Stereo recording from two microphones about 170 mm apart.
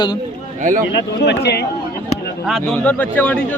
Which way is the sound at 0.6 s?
50° right (ahead or behind).